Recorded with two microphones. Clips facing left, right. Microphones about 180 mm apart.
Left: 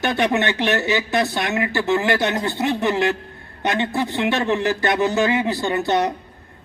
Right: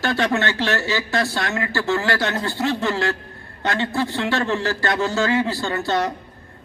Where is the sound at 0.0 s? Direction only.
20° left (ahead or behind).